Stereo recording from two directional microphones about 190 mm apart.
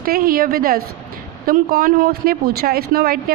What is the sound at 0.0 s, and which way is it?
A woman's voice, 50° right (ahead or behind).